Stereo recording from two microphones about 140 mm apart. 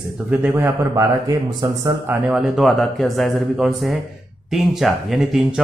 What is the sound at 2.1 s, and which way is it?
Speech, 10° right (ahead or behind).